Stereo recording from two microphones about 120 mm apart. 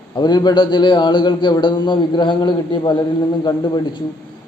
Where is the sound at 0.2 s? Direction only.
35° left (ahead or behind).